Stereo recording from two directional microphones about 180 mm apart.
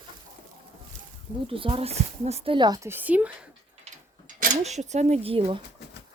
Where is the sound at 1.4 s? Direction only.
30° right (ahead or behind); by 3.3 s 10° right (ahead or behind).